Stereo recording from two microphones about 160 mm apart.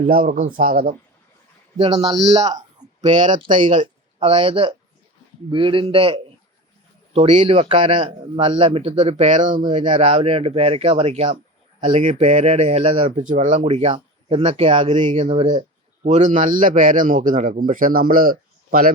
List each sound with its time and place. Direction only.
0.1 s a man's voice: 55° right (ahead or behind)
1.8 s a man's voice: 25° right (ahead or behind)
2.2 s a man's voice: 40° right (ahead or behind)
4.2 s a man's voice: 35° right (ahead or behind); by 10.0 s 55° right (ahead or behind)
10.0 s a man's voice: 35° right (ahead or behind)
13.1 s a man's voice: 50° right (ahead or behind); by 15.0 s 35° right (ahead or behind)
15.0 s a man's voice: 45° right (ahead or behind); by 18.9 s 65° right (ahead or behind)